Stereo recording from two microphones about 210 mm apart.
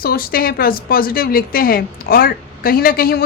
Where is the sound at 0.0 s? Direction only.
45° left (ahead or behind).